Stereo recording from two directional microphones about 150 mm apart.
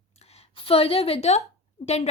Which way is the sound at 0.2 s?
45° left (ahead or behind).